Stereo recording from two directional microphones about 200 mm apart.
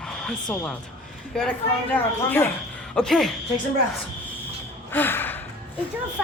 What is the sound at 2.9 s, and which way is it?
Speech, 5° left (ahead or behind).